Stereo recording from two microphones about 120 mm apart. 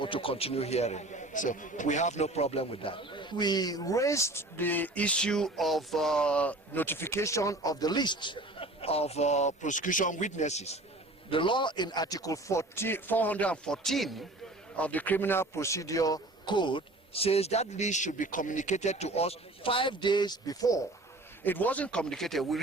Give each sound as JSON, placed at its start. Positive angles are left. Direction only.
{"t": 0.0, "sound": "a man's voice", "side_deg": 50}
{"t": 11.3, "sound": "a man's voice", "side_deg": 45}
{"t": 21.4, "sound": "speech", "side_deg": 15}